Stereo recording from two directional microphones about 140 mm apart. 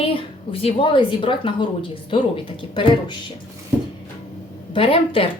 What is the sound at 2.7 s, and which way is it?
Speech, 35° left (ahead or behind).